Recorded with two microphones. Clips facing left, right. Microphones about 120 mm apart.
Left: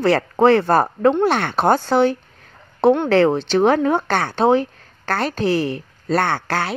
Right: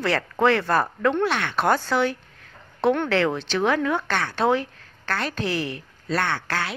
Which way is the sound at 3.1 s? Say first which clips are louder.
Left 7 dB; 35° left (ahead or behind).